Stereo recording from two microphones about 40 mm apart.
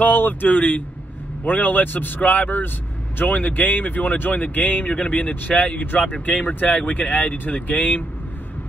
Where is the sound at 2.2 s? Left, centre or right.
Left.